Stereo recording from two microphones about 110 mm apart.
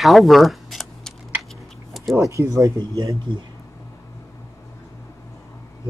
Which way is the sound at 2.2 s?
30° right (ahead or behind).